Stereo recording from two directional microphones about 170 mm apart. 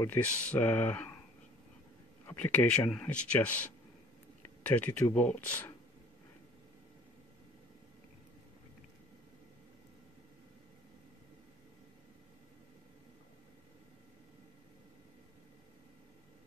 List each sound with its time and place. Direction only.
0.0 s speech: 10° left (ahead or behind)
2.2 s speech: 10° left (ahead or behind)